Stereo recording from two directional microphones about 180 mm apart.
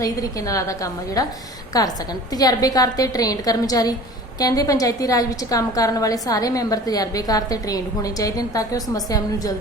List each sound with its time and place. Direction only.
0.0 s a woman's voice: 20° left (ahead or behind)
2.3 s a woman's voice: 20° left (ahead or behind)